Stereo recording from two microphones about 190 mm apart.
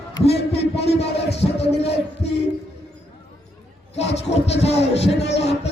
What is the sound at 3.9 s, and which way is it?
Music, 35° left (ahead or behind).